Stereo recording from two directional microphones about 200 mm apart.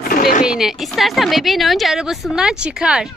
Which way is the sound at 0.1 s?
45° left (ahead or behind).